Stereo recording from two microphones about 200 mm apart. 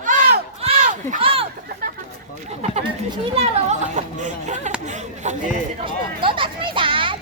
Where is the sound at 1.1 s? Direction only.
25° right (ahead or behind).